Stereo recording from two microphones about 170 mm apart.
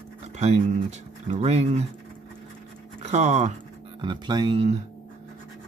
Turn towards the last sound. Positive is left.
turn(degrees=-30)  # may be behind; listen again after turning